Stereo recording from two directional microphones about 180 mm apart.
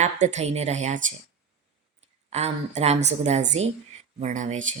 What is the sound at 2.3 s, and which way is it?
A woman's voice, 35° right (ahead or behind).